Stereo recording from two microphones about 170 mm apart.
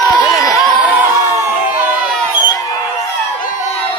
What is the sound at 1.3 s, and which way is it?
Crowd, 10° right (ahead or behind).